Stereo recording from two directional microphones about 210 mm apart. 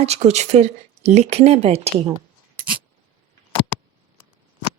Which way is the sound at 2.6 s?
40° right (ahead or behind).